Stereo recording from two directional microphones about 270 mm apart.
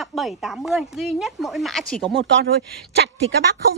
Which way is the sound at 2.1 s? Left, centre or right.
Right.